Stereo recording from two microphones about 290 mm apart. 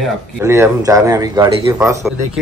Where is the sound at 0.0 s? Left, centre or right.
Centre.